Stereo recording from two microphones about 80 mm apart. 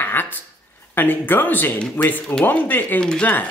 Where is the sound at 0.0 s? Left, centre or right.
Left.